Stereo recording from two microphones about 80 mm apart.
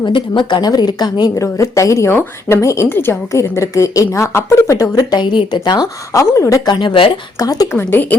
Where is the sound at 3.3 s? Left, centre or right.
Left.